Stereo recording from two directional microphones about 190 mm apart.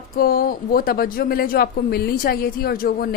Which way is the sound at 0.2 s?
50° left (ahead or behind).